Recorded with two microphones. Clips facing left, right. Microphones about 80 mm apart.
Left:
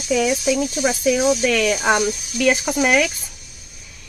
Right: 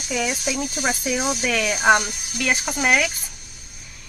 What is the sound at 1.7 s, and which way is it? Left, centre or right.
Speech, right.